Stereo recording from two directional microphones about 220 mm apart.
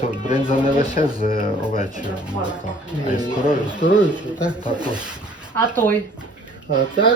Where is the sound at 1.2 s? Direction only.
40° left (ahead or behind).